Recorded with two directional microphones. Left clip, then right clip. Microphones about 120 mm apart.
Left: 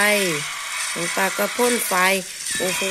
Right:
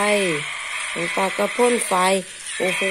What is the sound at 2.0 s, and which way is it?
Speech, 30° right (ahead or behind).